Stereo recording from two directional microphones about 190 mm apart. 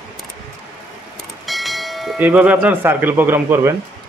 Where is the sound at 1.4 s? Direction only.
Centre (ahead or behind).